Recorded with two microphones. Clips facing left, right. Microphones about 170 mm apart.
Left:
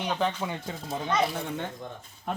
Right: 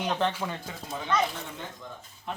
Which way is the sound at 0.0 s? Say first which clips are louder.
Even; centre (ahead or behind).